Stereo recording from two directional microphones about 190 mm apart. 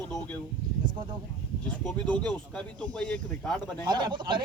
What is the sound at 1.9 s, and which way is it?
Speech, 5° left (ahead or behind).